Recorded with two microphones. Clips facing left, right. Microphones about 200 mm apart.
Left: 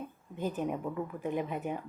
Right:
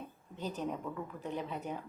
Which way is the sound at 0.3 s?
15° left (ahead or behind).